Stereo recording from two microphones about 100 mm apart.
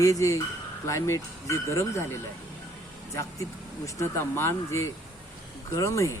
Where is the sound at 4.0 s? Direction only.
25° left (ahead or behind).